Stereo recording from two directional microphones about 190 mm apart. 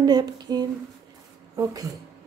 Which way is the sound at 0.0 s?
20° right (ahead or behind).